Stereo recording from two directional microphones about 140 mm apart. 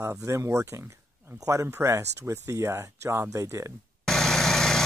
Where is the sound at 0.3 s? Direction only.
20° right (ahead or behind).